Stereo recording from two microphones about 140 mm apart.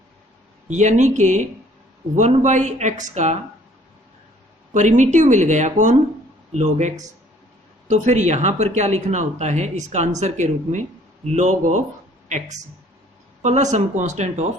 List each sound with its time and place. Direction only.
0.7 s speech: 60° right (ahead or behind)
4.7 s speech: 60° right (ahead or behind)
13.4 s speech: 55° right (ahead or behind)